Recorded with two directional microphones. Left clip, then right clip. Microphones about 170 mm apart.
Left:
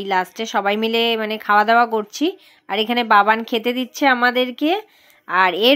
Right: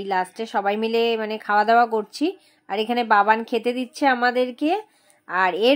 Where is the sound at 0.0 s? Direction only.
15° left (ahead or behind).